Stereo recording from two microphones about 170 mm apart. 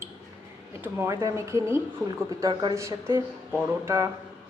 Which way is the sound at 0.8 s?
10° right (ahead or behind).